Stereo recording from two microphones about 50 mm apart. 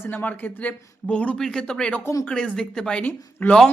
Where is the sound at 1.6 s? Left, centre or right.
Centre.